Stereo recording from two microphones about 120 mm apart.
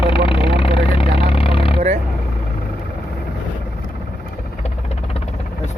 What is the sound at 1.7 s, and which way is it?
Vehicle, 65° right (ahead or behind).